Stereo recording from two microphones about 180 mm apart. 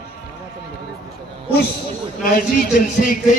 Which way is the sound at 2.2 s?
55° left (ahead or behind).